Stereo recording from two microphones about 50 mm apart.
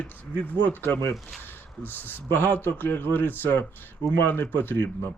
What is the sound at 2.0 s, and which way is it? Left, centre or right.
Speech, left.